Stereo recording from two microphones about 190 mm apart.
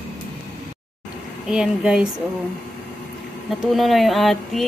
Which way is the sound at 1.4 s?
5° right (ahead or behind).